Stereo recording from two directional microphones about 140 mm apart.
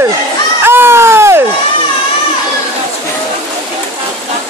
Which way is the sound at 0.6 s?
15° right (ahead or behind).